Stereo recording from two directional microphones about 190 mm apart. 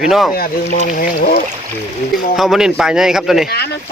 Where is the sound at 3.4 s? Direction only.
60° left (ahead or behind).